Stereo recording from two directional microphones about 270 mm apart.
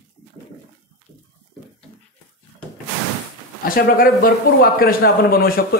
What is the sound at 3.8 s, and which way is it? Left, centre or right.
A man's voice, left.